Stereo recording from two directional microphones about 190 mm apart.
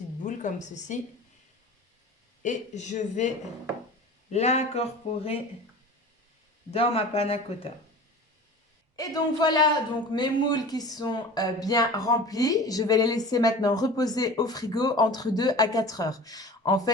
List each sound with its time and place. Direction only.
0.2 s a woman's voice: 40° left (ahead or behind)
2.4 s speech: 40° left (ahead or behind)
4.3 s speech: 35° left (ahead or behind)
6.7 s speech: 30° left (ahead or behind)
9.0 s speech: 20° left (ahead or behind)